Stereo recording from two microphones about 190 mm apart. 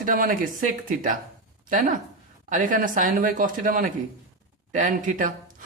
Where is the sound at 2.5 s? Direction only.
45° right (ahead or behind).